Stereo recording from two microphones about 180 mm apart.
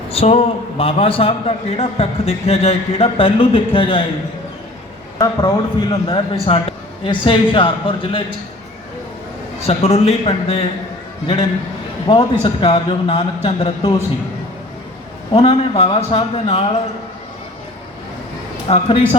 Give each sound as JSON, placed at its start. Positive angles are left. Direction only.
{"t": 0.1, "sound": "a man's voice", "side_deg": 35}
{"t": 5.1, "sound": "a man's voice", "side_deg": 20}
{"t": 9.6, "sound": "a man's voice", "side_deg": 35}
{"t": 12.0, "sound": "a man's voice", "side_deg": 30}
{"t": 15.3, "sound": "a man's voice", "side_deg": 30}
{"t": 18.7, "sound": "a man's voice", "side_deg": 35}